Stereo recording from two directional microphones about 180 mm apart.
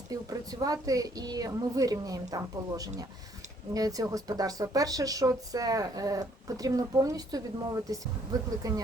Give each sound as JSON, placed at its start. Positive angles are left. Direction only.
{"t": 0.1, "sound": "speech", "side_deg": -20}